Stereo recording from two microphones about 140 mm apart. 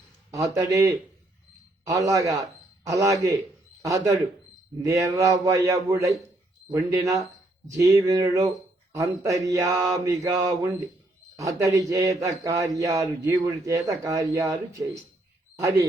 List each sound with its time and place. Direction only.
0.3 s mantra: 25° right (ahead or behind)
1.9 s speech: 25° right (ahead or behind)
3.8 s mantra: 25° right (ahead or behind)